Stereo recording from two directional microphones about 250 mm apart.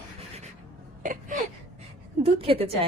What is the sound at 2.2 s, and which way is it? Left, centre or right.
Speech, right.